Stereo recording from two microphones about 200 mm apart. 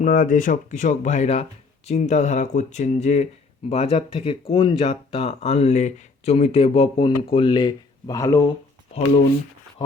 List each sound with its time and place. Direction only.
0.0 s speech: 40° left (ahead or behind); by 8.4 s 15° left (ahead or behind)